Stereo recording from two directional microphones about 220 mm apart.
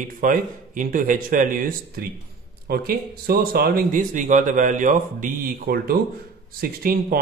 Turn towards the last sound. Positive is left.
turn(degrees=-40)  # may be behind; listen again after turning